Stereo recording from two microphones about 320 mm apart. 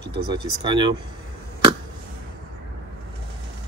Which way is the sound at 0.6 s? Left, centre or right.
Centre.